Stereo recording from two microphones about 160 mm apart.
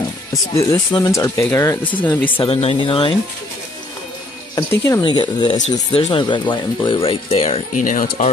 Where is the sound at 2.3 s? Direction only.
35° left (ahead or behind).